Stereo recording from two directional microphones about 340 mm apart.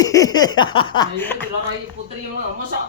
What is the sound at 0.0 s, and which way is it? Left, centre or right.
Speech, centre.